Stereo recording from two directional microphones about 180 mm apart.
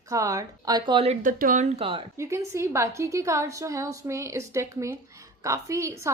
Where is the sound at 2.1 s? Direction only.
15° right (ahead or behind).